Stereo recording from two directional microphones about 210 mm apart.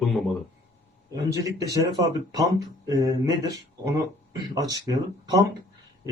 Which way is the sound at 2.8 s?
15° right (ahead or behind).